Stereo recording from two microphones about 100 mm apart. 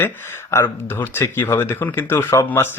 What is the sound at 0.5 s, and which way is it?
Speech, 25° left (ahead or behind).